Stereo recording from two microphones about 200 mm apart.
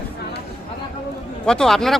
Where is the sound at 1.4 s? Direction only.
5° left (ahead or behind).